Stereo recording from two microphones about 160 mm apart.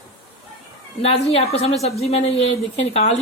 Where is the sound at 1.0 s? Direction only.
40° left (ahead or behind).